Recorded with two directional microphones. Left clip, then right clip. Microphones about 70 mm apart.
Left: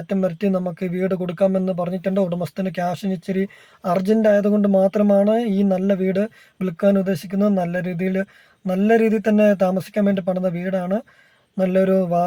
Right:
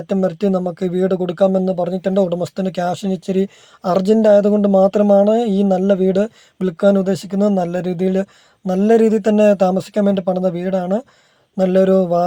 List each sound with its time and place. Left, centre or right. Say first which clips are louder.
0.1 s speech: right 4 dB; right
7.6 s speech: right 4 dB; right